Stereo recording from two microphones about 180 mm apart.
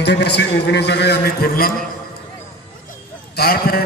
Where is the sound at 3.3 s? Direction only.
60° left (ahead or behind).